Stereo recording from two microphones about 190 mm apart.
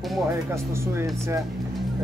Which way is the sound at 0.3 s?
15° right (ahead or behind).